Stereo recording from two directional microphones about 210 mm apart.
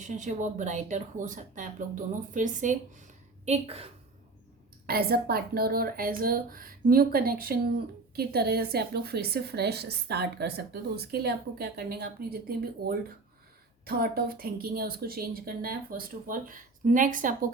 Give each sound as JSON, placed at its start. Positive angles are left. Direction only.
{"t": 0.0, "sound": "speech", "side_deg": -35}
{"t": 4.9, "sound": "a woman's voice", "side_deg": -45}